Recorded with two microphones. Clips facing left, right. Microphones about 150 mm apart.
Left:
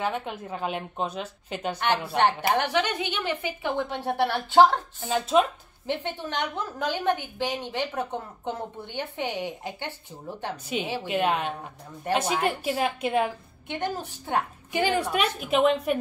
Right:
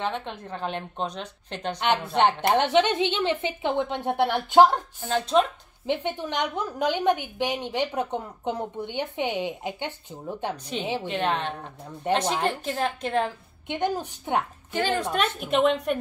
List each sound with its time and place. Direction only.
0.0 s a woman's voice: 5° left (ahead or behind)
2.5 s a woman's voice: 25° right (ahead or behind)
5.0 s a woman's voice: 5° left (ahead or behind)
5.9 s a woman's voice: 15° right (ahead or behind)
11.1 s a woman's voice: 10° left (ahead or behind)
13.7 s a woman's voice: 15° right (ahead or behind)
14.7 s a woman's voice: 10° left (ahead or behind)